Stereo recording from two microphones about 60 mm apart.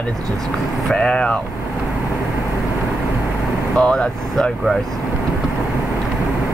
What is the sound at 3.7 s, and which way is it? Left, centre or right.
Speech, centre.